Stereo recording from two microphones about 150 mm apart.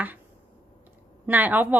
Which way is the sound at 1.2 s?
10° right (ahead or behind).